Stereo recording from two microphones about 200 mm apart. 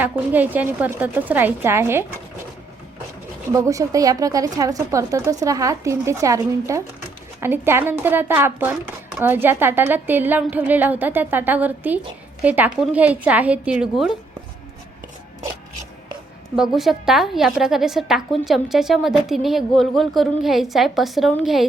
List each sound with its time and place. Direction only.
0.0 s a woman's voice: 10° right (ahead or behind)
3.5 s a woman's voice: 15° right (ahead or behind)
16.6 s a woman's voice: centre (ahead or behind)